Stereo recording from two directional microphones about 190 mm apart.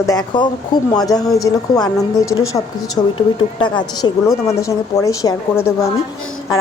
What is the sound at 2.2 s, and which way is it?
Speech, 90° left.